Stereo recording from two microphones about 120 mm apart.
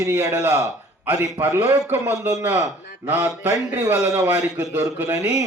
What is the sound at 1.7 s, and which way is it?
A man's voice, 10° right (ahead or behind).